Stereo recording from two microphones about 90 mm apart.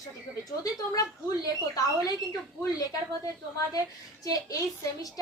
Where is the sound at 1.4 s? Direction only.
40° left (ahead or behind).